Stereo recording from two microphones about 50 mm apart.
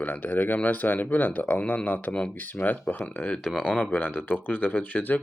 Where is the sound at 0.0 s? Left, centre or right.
Left.